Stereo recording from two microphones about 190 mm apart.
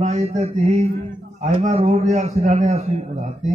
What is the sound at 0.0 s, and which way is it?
Mantra, 35° right (ahead or behind).